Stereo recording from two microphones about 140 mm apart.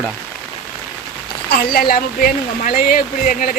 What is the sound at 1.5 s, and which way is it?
Speech, 90° left.